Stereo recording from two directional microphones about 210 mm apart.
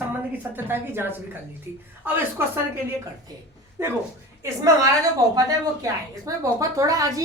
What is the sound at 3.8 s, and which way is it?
Speech, 15° right (ahead or behind).